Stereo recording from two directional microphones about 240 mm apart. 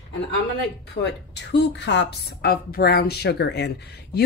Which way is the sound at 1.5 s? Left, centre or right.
Left.